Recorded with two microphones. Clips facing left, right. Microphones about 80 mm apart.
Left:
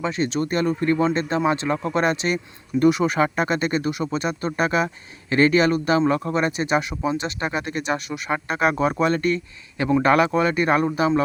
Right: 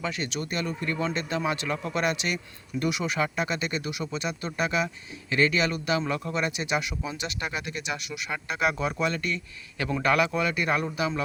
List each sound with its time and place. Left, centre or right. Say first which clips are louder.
0.0 s a man's voice: left 8 dB; left